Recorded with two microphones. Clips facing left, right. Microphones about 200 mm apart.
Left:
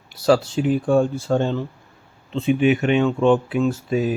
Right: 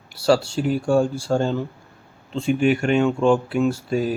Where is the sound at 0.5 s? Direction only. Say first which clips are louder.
Left 1 dB; centre (ahead or behind).